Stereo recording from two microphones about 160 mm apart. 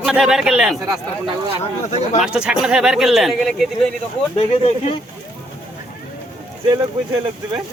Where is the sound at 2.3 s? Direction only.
5° right (ahead or behind).